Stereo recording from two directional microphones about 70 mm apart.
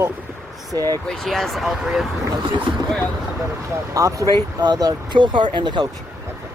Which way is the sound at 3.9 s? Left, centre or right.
Right.